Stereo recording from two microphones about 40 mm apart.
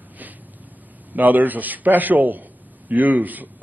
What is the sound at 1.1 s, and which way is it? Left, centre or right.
A man's voice, right.